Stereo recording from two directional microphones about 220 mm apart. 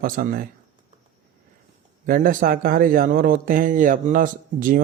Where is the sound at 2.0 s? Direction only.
40° right (ahead or behind).